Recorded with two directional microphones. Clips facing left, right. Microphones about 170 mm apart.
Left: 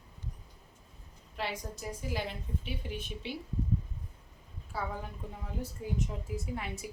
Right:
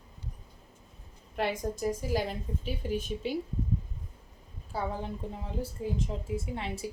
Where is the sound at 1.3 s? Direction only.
50° right (ahead or behind).